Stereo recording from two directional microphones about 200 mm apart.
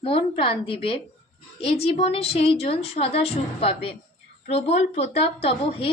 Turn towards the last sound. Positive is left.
turn(degrees=30)  # may be behind; listen again after turning